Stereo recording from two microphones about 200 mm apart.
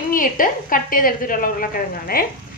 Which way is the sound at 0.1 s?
45° left (ahead or behind).